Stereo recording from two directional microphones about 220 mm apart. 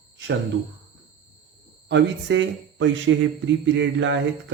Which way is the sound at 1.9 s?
55° right (ahead or behind).